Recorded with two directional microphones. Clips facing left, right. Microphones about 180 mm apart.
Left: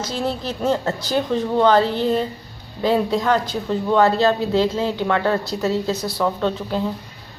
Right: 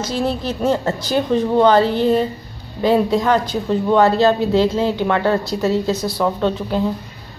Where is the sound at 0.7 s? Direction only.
15° right (ahead or behind).